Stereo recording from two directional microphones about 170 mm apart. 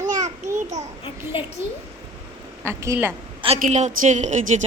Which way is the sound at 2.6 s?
15° right (ahead or behind).